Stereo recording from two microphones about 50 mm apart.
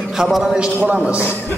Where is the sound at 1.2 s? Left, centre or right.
Left.